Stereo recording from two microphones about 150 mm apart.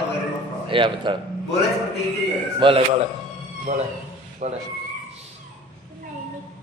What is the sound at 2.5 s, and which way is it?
Speech, 35° right (ahead or behind).